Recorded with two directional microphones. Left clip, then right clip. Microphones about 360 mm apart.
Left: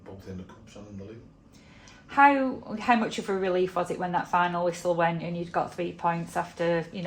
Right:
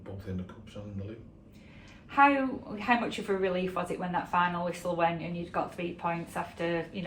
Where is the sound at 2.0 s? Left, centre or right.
Left.